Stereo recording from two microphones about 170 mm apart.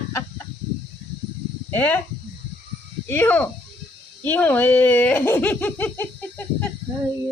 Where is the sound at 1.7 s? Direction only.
10° left (ahead or behind).